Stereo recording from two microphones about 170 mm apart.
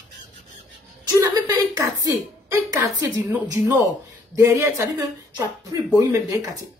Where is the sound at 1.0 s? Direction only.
25° right (ahead or behind).